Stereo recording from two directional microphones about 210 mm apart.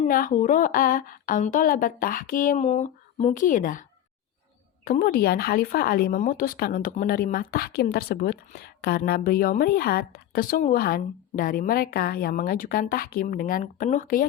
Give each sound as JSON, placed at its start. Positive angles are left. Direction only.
{"t": 0.0, "sound": "a woman's voice", "side_deg": 40}
{"t": 4.9, "sound": "speech", "side_deg": 45}